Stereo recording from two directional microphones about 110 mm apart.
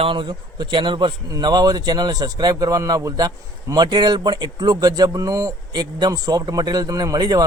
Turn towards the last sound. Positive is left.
turn(degrees=-35)  # may be behind; listen again after turning